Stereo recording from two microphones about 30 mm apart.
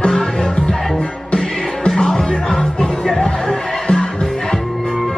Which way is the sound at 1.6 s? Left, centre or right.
Left.